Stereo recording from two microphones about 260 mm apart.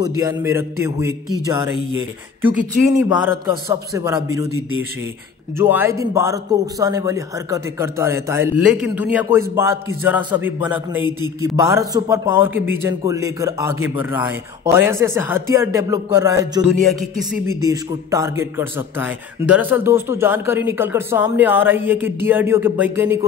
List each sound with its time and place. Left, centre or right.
0.0 s a man's voice: centre
2.4 s a man's voice: centre
11.1 s a man's voice: centre
11.5 s a man's voice: centre
17.0 s speech: centre
17.6 s a man's voice: centre